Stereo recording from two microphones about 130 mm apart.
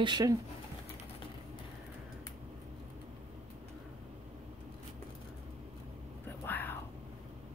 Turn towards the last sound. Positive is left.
turn(degrees=15)  # may be behind; listen again after turning